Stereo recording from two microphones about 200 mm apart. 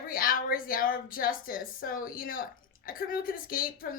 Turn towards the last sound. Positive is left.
turn(degrees=45)  # may be behind; listen again after turning